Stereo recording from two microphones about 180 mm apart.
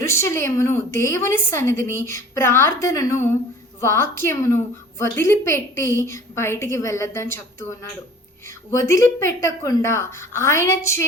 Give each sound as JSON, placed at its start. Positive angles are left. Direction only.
{"t": 0.0, "sound": "a woman's voice", "side_deg": 15}
{"t": 8.9, "sound": "a woman's voice", "side_deg": 15}